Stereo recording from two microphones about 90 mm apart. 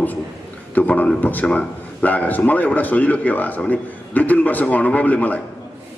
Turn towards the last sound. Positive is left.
turn(degrees=20)  # may be behind; listen again after turning